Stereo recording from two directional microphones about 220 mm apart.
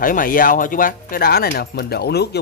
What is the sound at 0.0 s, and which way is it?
Speech, 40° left (ahead or behind).